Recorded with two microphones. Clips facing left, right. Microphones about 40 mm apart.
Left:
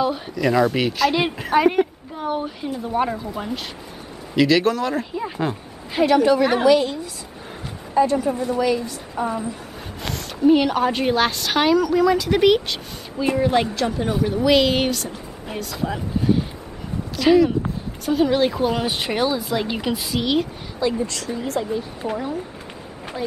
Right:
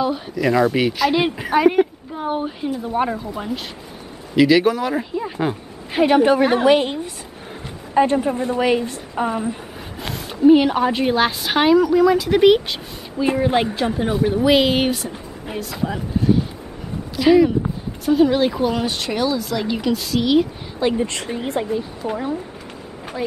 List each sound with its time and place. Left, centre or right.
0.0 s speech: centre
6.0 s a woman's voice: right
10.0 s speech: centre
13.4 s a woman's voice: centre
17.2 s speech: centre
17.6 s speech: centre
18.9 s speech: centre
20.2 s speech: centre
20.8 s a woman's voice: right
21.6 s speech: centre